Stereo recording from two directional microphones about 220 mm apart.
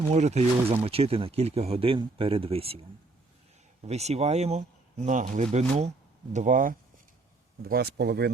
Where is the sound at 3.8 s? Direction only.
30° right (ahead or behind).